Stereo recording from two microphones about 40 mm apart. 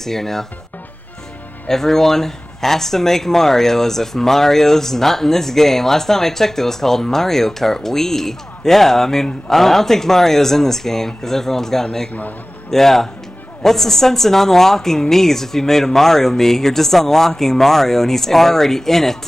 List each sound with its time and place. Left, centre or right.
0.0 s speech: centre
1.7 s speech: centre